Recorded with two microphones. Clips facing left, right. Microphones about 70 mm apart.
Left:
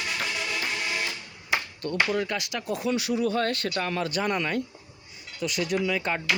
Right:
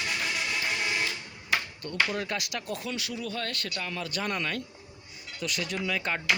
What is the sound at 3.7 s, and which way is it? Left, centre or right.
Speech, left.